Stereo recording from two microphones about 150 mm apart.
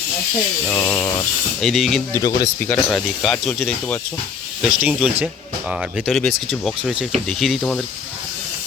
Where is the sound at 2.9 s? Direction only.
Centre (ahead or behind).